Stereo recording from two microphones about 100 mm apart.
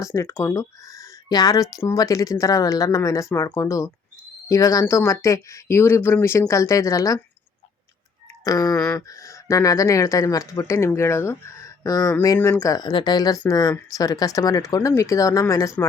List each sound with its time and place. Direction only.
0.0 s speech: 30° left (ahead or behind)
8.4 s speech: 35° left (ahead or behind)
12.9 s speech: 55° left (ahead or behind)
13.1 s speech: 40° left (ahead or behind)